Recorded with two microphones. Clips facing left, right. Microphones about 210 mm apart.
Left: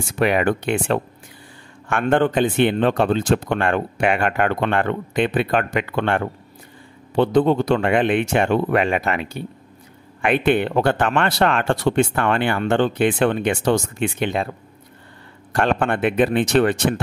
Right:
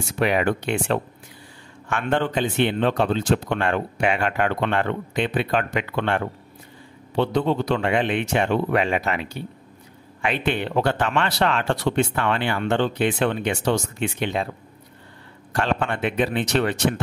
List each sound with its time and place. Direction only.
0.2 s speech: 55° left (ahead or behind)
15.5 s speech: 55° left (ahead or behind)